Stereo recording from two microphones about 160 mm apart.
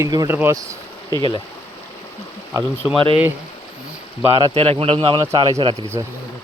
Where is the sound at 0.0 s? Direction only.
20° right (ahead or behind).